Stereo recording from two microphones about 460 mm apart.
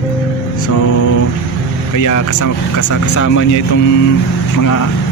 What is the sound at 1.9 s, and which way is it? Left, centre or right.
Speech, left.